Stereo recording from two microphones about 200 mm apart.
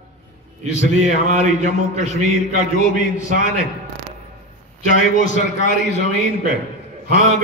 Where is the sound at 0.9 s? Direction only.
35° right (ahead or behind).